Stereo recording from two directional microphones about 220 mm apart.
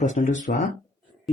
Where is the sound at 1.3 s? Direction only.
Centre (ahead or behind).